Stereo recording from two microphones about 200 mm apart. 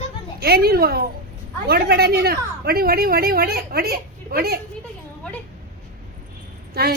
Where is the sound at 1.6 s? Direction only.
50° right (ahead or behind).